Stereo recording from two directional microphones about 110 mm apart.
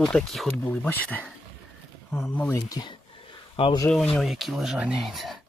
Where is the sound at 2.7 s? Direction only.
40° left (ahead or behind).